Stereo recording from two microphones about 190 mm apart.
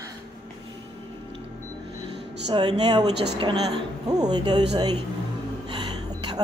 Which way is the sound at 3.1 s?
60° right (ahead or behind).